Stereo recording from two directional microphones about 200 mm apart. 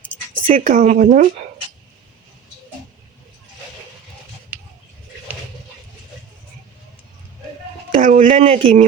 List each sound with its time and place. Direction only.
0.4 s speech: 40° right (ahead or behind)
7.9 s a sound: 40° right (ahead or behind)
8.3 s speech: 30° right (ahead or behind)